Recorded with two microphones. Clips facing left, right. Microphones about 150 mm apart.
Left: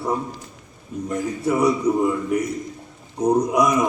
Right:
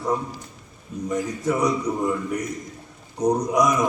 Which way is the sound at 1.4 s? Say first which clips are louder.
Left 4 dB; 5° left (ahead or behind).